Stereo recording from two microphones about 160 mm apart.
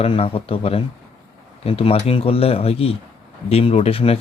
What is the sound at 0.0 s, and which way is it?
Speech, 35° left (ahead or behind).